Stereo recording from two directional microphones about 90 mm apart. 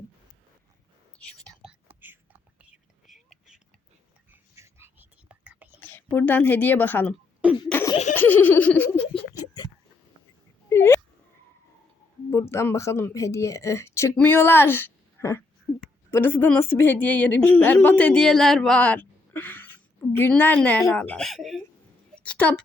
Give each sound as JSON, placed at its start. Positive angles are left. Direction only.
{"t": 1.5, "sound": "whispering", "side_deg": 5}
{"t": 1.9, "sound": "whispering", "side_deg": -20}
{"t": 3.1, "sound": "whispering", "side_deg": -5}
{"t": 4.5, "sound": "whispering", "side_deg": -35}
{"t": 4.9, "sound": "whispering", "side_deg": -20}
{"t": 5.8, "sound": "a woman's voice", "side_deg": 20}
{"t": 7.4, "sound": "cough", "side_deg": -15}
{"t": 8.1, "sound": "laughter", "side_deg": 20}
{"t": 10.7, "sound": "a sound", "side_deg": 30}
{"t": 12.3, "sound": "a woman's voice", "side_deg": 30}
{"t": 18.8, "sound": "a woman's voice", "side_deg": 15}
{"t": 20.6, "sound": "speech", "side_deg": 10}
{"t": 21.2, "sound": "speech", "side_deg": 0}
{"t": 22.2, "sound": "a woman's voice", "side_deg": 15}